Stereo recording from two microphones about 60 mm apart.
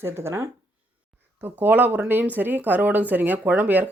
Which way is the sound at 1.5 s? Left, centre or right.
Right.